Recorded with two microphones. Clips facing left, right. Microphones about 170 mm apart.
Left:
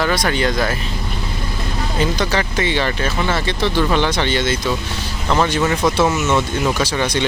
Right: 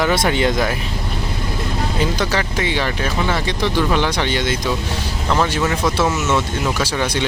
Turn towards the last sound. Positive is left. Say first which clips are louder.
# left 1 dB
turn(degrees=-5)  # may be behind; listen again after turning